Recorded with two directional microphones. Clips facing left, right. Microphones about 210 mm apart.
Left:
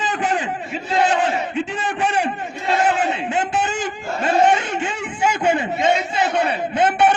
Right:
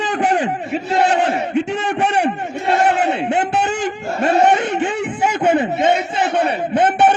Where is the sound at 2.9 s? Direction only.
65° right (ahead or behind).